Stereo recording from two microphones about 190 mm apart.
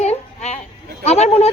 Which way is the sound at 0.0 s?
35° left (ahead or behind).